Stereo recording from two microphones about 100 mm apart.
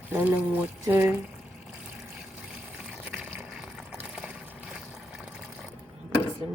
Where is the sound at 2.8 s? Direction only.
10° right (ahead or behind).